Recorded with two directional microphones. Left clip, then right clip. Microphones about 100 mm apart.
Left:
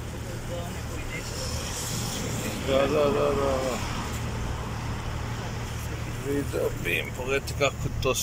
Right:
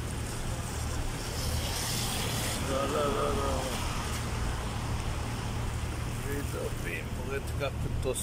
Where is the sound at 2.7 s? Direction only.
15° left (ahead or behind).